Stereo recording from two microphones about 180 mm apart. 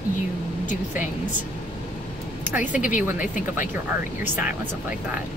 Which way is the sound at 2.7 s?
45° left (ahead or behind).